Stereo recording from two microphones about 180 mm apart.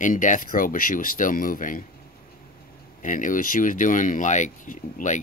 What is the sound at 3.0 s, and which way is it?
Speech, 45° left (ahead or behind).